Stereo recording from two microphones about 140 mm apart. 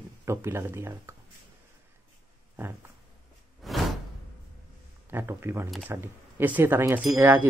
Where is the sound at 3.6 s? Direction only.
Centre (ahead or behind).